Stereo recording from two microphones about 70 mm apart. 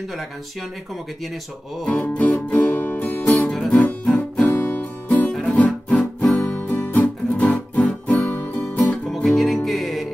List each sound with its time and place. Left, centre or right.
1.9 s music: centre
3.3 s music: centre
4.6 s music: left
5.3 s guitar: centre
5.9 s music: centre
9.1 s music: centre